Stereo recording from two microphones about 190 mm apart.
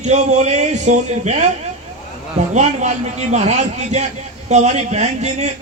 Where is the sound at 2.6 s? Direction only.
35° right (ahead or behind).